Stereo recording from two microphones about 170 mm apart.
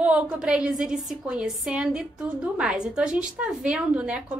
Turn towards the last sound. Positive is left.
turn(degrees=-5)  # may be behind; listen again after turning